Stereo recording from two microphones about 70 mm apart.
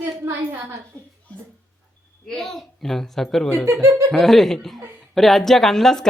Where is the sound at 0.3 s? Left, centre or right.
Right.